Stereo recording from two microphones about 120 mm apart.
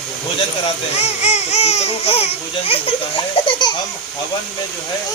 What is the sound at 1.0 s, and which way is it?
Speech, 65° left (ahead or behind).